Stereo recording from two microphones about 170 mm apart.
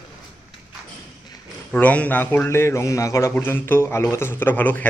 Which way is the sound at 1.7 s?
10° left (ahead or behind).